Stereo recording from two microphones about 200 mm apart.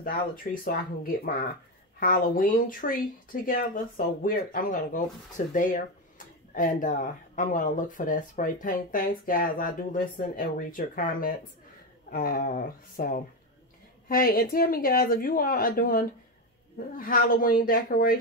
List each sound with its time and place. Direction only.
0.0 s speech: 45° left (ahead or behind)